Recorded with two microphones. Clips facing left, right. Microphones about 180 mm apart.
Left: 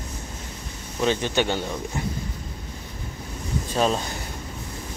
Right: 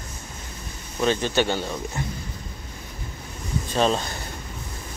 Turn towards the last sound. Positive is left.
turn(degrees=5)  # may be behind; listen again after turning